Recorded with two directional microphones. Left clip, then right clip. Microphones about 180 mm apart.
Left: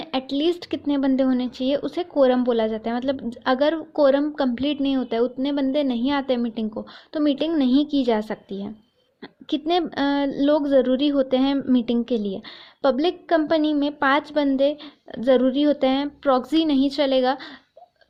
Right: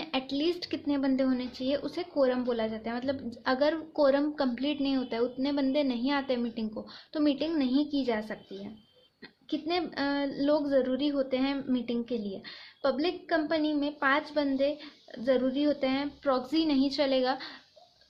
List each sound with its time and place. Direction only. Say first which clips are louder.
0.0 s speech: left 7 dB; 35° left (ahead or behind)
9.5 s a woman's voice: left 9 dB; 45° left (ahead or behind)